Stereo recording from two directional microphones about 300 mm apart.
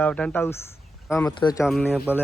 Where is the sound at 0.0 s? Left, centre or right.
Centre.